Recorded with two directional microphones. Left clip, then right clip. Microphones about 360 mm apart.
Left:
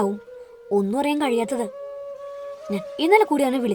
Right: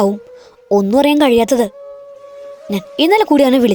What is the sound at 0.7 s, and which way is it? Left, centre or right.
A woman's voice, right.